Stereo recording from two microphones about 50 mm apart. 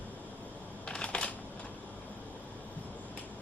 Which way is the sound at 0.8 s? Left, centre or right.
Left.